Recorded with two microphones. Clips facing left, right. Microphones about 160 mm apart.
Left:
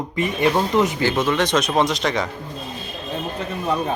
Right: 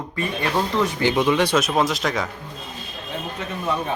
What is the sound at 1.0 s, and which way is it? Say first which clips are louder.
Speech: right 1 dB; 15° right (ahead or behind).